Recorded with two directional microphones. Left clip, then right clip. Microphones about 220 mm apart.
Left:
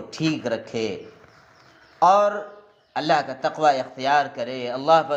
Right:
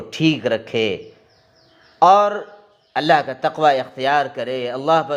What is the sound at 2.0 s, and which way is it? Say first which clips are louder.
A man's voice: right 4 dB; 40° right (ahead or behind).